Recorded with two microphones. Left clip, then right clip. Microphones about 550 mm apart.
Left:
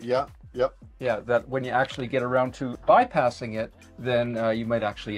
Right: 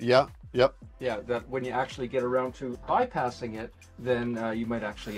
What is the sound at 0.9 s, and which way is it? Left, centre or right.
Speech, left.